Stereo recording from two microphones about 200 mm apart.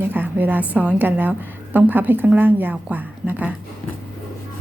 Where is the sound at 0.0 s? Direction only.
10° right (ahead or behind).